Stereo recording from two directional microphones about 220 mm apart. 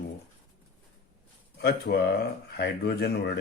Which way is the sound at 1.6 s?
45° left (ahead or behind).